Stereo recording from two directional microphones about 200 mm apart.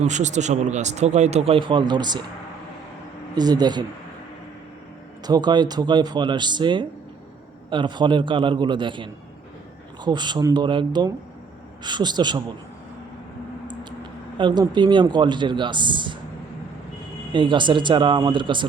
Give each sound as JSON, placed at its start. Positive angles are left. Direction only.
{"t": 0.0, "sound": "a man's voice", "side_deg": -35}
{"t": 3.3, "sound": "speech", "side_deg": -20}
{"t": 5.2, "sound": "speech", "side_deg": -20}
{"t": 14.3, "sound": "speech", "side_deg": -20}
{"t": 17.3, "sound": "speech", "side_deg": -25}